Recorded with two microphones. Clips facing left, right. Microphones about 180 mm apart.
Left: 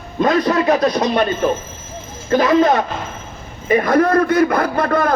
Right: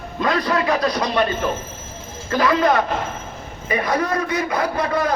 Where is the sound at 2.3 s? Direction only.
25° left (ahead or behind).